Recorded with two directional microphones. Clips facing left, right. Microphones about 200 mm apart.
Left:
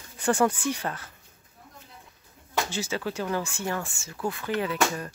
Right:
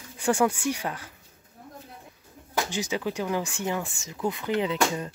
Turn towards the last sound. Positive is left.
turn(degrees=-20)  # may be behind; listen again after turning